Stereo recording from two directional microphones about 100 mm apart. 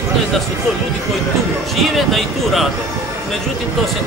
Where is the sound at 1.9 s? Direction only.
Centre (ahead or behind).